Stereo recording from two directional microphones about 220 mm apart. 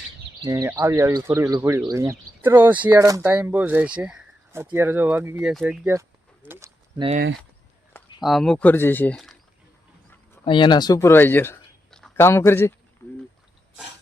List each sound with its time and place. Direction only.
0.4 s speech: 15° right (ahead or behind)
7.9 s speech: centre (ahead or behind)
10.4 s speech: 20° left (ahead or behind)